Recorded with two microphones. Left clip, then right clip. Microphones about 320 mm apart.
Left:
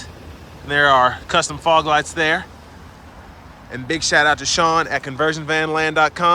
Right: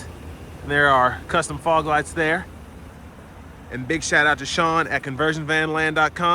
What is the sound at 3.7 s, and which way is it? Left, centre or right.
Speech, centre.